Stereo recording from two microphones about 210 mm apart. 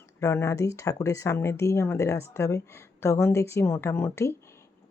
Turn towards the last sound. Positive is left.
turn(degrees=10)  # may be behind; listen again after turning